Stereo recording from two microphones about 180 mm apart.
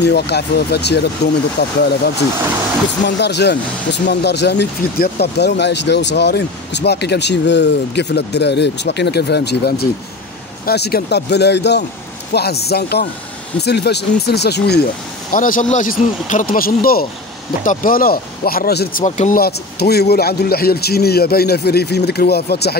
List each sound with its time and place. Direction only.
0.0 s speech: 65° left (ahead or behind)
3.2 s a man's voice: 70° left (ahead or behind)
15.3 s speech: 50° left (ahead or behind)
19.0 s speech: 40° left (ahead or behind)
19.4 s a man's voice: 60° left (ahead or behind)